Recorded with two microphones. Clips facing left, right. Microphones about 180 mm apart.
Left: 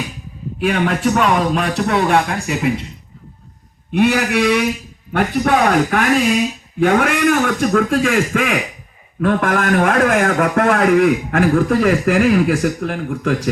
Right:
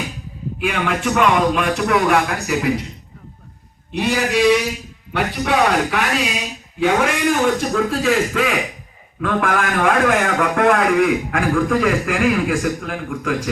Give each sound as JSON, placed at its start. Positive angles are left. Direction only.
{"t": 0.6, "sound": "a man's voice", "side_deg": 40}
{"t": 3.9, "sound": "a man's voice", "side_deg": 60}